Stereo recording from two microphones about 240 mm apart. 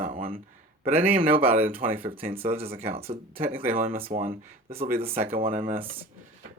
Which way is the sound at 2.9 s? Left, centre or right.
Right.